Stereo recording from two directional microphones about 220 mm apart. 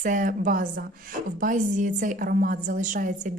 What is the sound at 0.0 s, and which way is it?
A woman's voice, 35° right (ahead or behind).